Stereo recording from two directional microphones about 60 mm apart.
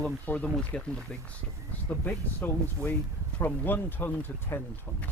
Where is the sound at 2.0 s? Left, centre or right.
Left.